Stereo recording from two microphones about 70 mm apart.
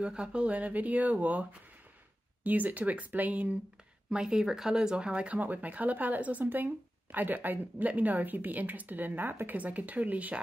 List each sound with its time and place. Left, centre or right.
0.0 s speech: centre
4.1 s speech: centre